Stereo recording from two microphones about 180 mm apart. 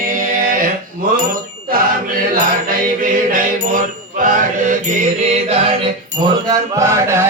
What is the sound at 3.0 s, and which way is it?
Mantra, 50° right (ahead or behind).